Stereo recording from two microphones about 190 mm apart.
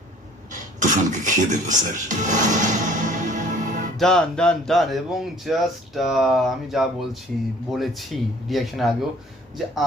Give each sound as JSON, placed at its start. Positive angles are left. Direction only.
{"t": 0.5, "sound": "music", "side_deg": -40}
{"t": 3.9, "sound": "speech", "side_deg": 5}